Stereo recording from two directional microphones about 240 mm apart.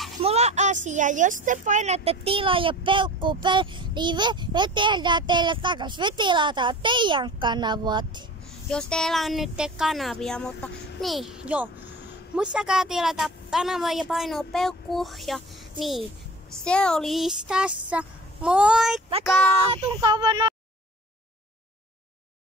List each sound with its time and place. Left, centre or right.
0.2 s speech: right
8.6 s a woman's voice: centre
16.5 s a woman's voice: centre
19.7 s speech: centre